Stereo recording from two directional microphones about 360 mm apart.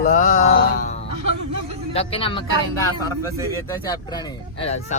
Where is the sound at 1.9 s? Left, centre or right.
Centre.